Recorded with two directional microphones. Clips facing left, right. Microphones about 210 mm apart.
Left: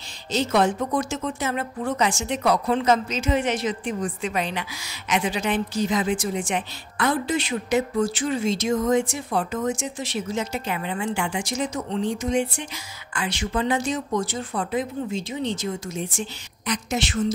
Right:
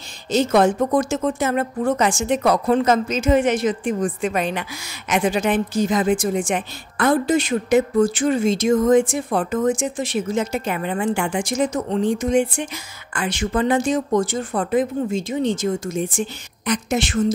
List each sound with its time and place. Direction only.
0.3 s a woman's voice: 50° right (ahead or behind)